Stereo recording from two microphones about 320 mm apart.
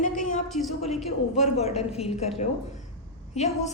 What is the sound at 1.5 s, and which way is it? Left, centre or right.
Speech, centre.